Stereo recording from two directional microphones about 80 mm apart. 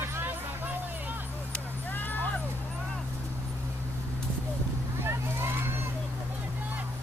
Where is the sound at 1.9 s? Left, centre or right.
Left.